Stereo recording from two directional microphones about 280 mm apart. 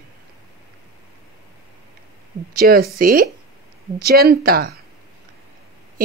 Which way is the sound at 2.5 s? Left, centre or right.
Right.